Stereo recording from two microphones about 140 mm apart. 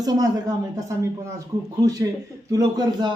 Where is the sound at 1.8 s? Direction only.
25° right (ahead or behind).